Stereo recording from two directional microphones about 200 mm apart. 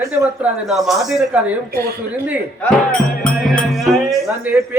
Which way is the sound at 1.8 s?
50° right (ahead or behind).